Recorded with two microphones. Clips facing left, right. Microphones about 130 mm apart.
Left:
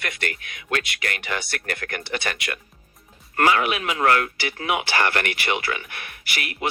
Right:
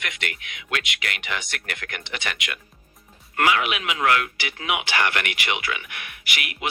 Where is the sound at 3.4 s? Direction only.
35° left (ahead or behind).